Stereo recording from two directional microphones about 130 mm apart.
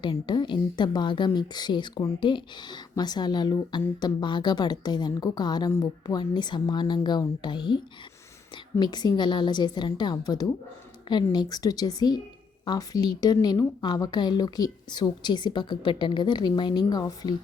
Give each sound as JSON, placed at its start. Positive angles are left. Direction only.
{"t": 0.0, "sound": "speech", "side_deg": 35}
{"t": 8.8, "sound": "speech", "side_deg": 35}